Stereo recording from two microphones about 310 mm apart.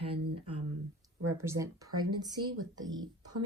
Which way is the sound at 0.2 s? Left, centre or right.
Right.